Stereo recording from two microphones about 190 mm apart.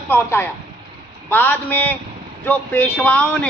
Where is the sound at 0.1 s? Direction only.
10° left (ahead or behind).